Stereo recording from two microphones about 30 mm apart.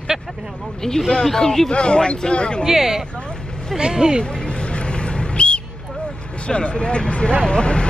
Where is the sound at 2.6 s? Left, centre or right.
Centre.